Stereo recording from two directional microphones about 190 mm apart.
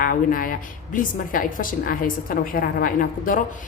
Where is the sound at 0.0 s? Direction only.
45° left (ahead or behind).